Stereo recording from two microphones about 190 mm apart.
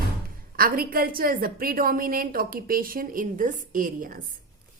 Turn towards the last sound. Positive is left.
turn(degrees=-45)  # may be behind; listen again after turning